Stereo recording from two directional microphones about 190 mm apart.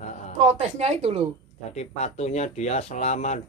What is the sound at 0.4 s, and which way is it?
Speech, 35° right (ahead or behind).